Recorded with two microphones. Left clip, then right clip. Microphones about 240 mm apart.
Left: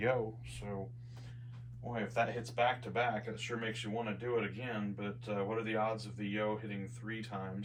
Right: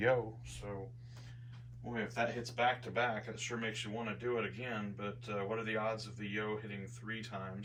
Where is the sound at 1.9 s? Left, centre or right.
Centre.